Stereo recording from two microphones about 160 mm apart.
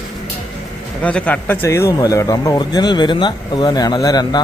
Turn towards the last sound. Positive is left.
turn(degrees=25)  # may be behind; listen again after turning